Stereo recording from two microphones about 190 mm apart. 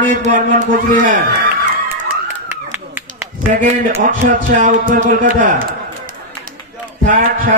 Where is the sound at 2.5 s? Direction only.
10° right (ahead or behind).